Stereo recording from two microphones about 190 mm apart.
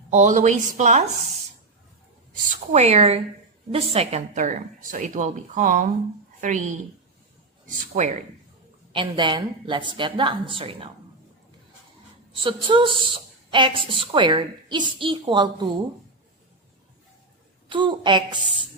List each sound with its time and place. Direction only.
0.1 s speech: 40° right (ahead or behind)
2.3 s a woman's voice: 40° right (ahead or behind)
8.9 s a woman's voice: 25° right (ahead or behind)
12.3 s a woman's voice: 25° right (ahead or behind)
17.7 s a woman's voice: 25° right (ahead or behind)